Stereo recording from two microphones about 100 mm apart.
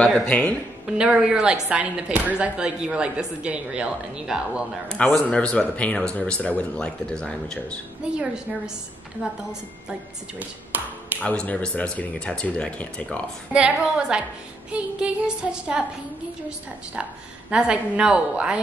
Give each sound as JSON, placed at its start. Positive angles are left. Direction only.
{"t": 0.0, "sound": "speech", "side_deg": 5}
{"t": 0.8, "sound": "speech", "side_deg": -10}
{"t": 4.8, "sound": "speech", "side_deg": 10}
{"t": 8.0, "sound": "speech", "side_deg": -10}
{"t": 11.2, "sound": "speech", "side_deg": 10}
{"t": 13.5, "sound": "speech", "side_deg": -10}